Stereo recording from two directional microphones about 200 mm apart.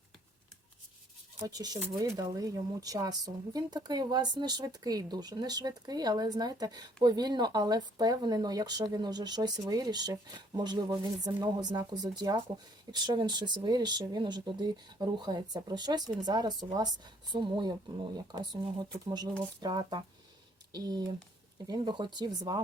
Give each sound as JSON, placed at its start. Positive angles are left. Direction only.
{"t": 1.5, "sound": "speech", "side_deg": -20}